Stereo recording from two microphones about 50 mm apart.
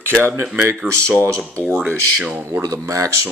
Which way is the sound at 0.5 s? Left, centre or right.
Right.